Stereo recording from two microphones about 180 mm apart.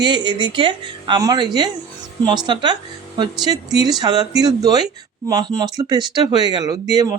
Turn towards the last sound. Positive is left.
turn(degrees=-20)  # may be behind; listen again after turning